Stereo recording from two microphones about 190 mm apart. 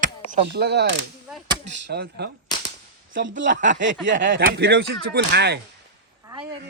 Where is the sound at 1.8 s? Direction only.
60° right (ahead or behind).